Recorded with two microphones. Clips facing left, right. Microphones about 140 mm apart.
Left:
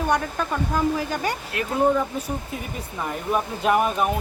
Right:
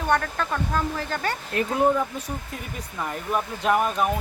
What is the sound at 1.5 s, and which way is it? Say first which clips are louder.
Speech: right 3 dB; 35° right (ahead or behind).